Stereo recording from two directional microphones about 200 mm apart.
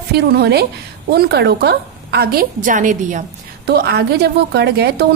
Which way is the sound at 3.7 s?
55° right (ahead or behind).